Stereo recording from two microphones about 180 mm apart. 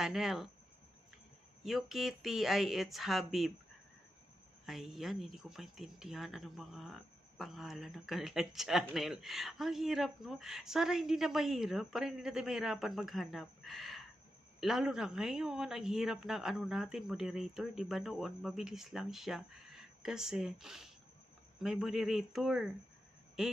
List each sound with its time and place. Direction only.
0.0 s speech: centre (ahead or behind)
1.6 s speech: centre (ahead or behind)
4.6 s speech: centre (ahead or behind)